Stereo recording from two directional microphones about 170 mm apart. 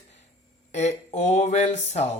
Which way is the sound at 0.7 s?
40° left (ahead or behind).